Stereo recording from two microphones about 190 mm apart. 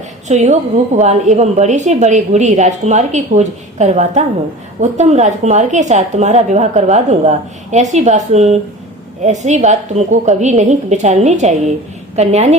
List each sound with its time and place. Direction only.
0.3 s a woman's voice: 35° right (ahead or behind)